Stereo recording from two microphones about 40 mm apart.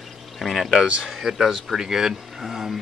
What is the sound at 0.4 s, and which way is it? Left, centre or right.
Speech, centre.